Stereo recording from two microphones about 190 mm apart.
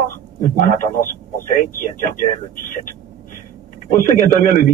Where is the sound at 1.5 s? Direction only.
45° left (ahead or behind).